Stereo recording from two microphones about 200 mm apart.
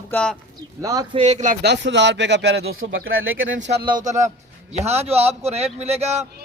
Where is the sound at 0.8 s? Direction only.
20° right (ahead or behind); by 1.6 s 35° right (ahead or behind).